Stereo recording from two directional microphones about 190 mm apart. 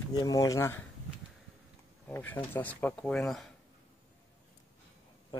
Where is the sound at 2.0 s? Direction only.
10° left (ahead or behind).